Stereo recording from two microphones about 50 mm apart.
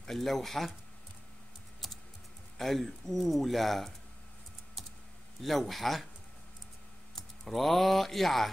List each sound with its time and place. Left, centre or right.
0.0 s speech: centre
1.8 s typing: centre
2.5 s speech: centre
4.8 s typing: centre
5.4 s speech: centre
7.2 s speech: centre